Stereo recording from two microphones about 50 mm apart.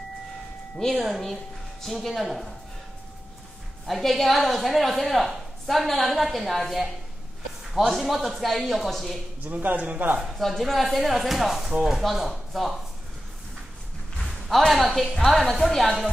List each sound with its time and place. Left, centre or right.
0.7 s a woman's voice: centre
3.8 s a woman's voice: centre
9.4 s speech: right
10.2 s a woman's voice: centre
14.5 s a woman's voice: centre